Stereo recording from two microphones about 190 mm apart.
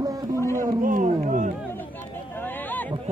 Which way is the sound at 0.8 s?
45° right (ahead or behind).